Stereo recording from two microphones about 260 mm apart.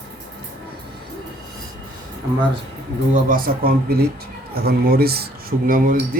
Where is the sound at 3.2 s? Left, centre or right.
Right.